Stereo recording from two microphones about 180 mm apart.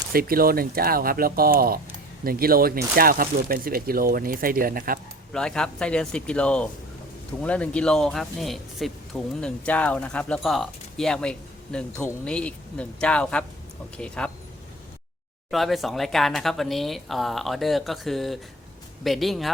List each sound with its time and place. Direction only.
0.1 s speech: 55° right (ahead or behind)
5.3 s speech: 5° left (ahead or behind)
15.4 s speech: centre (ahead or behind)